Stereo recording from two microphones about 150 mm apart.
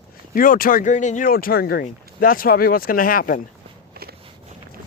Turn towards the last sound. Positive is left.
turn(degrees=-90)